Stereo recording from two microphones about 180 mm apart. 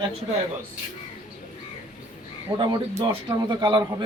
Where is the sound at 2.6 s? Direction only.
25° right (ahead or behind).